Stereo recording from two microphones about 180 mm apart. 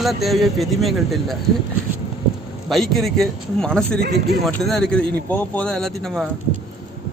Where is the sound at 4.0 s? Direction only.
65° right (ahead or behind).